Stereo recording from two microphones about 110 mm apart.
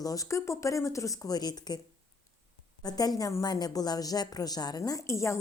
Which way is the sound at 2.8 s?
35° left (ahead or behind).